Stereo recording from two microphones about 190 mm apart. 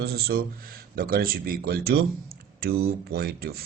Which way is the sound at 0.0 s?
55° right (ahead or behind).